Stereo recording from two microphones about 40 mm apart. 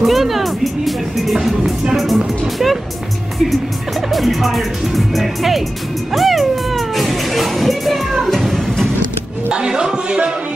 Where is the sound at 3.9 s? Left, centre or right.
Centre.